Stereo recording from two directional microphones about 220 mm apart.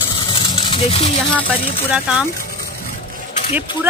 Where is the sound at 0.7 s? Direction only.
25° left (ahead or behind).